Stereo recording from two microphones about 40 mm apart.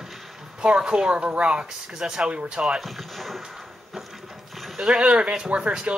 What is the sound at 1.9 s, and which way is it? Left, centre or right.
Speech, centre.